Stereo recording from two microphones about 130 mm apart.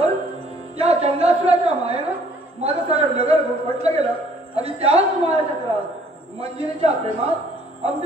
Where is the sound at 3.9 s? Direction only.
55° right (ahead or behind).